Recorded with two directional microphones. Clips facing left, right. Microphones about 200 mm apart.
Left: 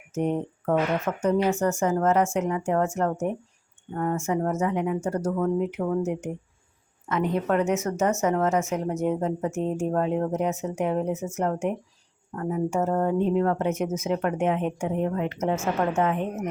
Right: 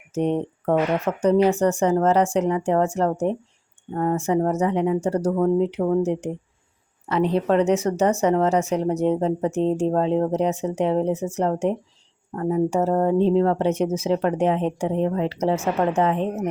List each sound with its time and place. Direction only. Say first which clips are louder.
0.1 s speech: right 4 dB; 35° right (ahead or behind)